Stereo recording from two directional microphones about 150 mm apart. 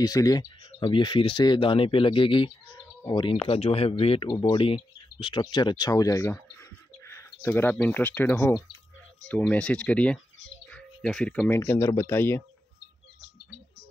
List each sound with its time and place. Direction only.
0.0 s speech: 25° left (ahead or behind)